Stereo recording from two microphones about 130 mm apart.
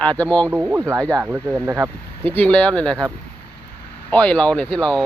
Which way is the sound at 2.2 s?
15° left (ahead or behind).